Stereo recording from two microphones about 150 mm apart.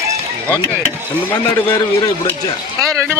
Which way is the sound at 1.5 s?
25° left (ahead or behind).